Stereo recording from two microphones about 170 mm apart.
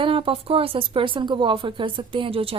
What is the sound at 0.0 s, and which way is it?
A woman's voice, 30° right (ahead or behind).